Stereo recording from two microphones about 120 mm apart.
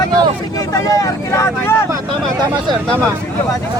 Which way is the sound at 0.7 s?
30° left (ahead or behind).